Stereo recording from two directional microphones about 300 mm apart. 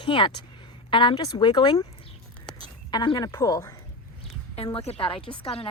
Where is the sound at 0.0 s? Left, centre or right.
Centre.